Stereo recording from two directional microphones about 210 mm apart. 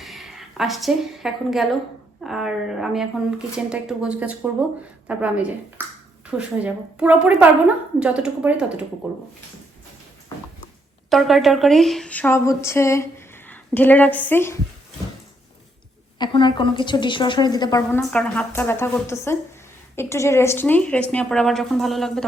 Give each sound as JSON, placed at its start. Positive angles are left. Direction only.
{"t": 0.0, "sound": "a woman's voice", "side_deg": 0}
{"t": 11.1, "sound": "speech", "side_deg": 0}
{"t": 16.1, "sound": "a woman's voice", "side_deg": 20}
{"t": 18.1, "sound": "speech", "side_deg": 5}